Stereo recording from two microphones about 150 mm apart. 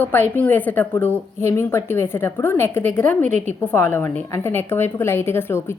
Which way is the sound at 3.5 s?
15° left (ahead or behind).